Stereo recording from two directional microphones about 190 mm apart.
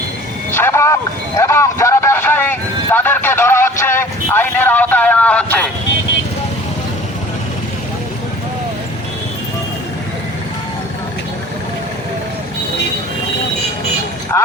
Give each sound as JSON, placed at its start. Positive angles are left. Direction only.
{"t": 0.5, "sound": "speech", "side_deg": 15}
{"t": 1.4, "sound": "vehicle", "side_deg": 15}
{"t": 14.3, "sound": "music", "side_deg": 15}